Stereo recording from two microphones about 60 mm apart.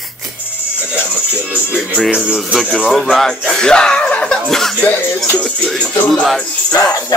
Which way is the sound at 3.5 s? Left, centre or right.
Centre.